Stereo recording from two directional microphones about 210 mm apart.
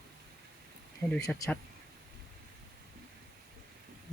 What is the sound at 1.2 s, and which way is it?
Speech, 10° left (ahead or behind).